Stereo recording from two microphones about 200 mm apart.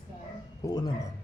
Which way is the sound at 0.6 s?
20° left (ahead or behind).